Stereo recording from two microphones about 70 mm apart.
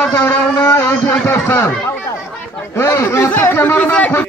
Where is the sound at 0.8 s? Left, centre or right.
Left.